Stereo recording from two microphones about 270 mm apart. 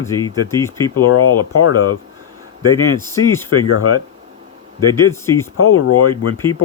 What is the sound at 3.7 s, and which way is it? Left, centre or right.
Speech, left.